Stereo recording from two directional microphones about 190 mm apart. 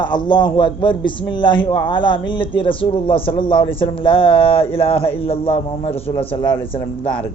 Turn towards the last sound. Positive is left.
turn(degrees=25)  # may be behind; listen again after turning